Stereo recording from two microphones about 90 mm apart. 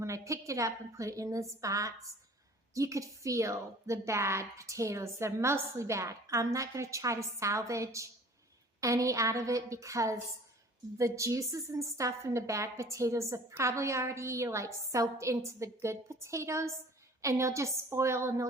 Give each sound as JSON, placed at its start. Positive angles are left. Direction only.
{"t": 0.0, "sound": "a woman's voice", "side_deg": -35}